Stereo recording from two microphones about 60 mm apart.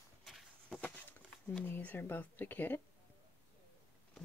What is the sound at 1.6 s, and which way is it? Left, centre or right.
Speech, left.